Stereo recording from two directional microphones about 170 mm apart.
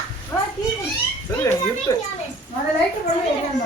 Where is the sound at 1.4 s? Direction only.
15° left (ahead or behind).